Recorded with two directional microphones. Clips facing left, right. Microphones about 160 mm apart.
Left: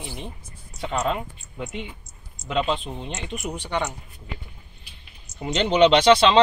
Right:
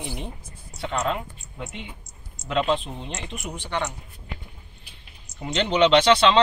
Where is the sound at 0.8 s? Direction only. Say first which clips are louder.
Left 1 dB; 5° left (ahead or behind).